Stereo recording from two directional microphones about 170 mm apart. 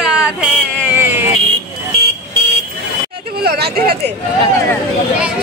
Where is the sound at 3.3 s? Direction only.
65° right (ahead or behind).